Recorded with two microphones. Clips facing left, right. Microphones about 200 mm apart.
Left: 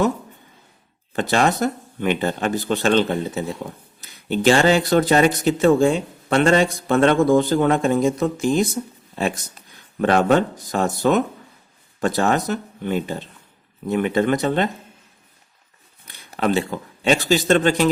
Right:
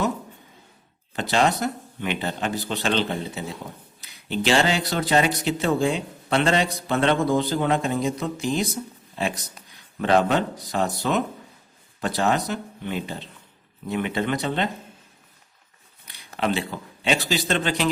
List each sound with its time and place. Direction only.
1.1 s speech: 50° left (ahead or behind)
16.4 s speech: 45° left (ahead or behind)